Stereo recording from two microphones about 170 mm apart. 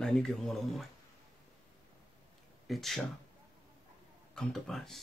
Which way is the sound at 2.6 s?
Centre (ahead or behind).